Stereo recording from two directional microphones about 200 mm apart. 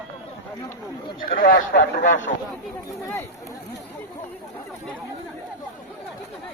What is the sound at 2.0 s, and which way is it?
Speech, 40° left (ahead or behind).